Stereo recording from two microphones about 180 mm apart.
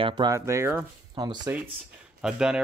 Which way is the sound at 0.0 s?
20° right (ahead or behind).